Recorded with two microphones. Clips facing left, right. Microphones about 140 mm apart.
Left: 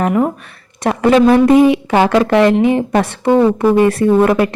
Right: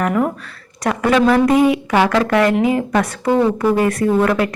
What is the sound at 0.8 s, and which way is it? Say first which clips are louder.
A woman's voice: left 4 dB; 25° left (ahead or behind).